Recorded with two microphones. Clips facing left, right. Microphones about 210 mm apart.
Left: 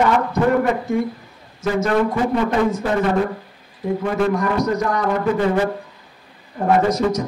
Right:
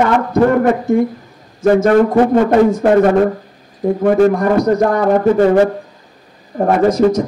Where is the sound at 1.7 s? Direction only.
50° right (ahead or behind).